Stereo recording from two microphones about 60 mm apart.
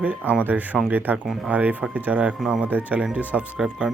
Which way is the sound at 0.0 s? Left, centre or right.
Right.